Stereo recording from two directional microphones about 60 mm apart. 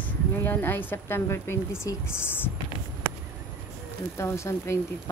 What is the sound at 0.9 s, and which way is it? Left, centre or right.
Speech, left.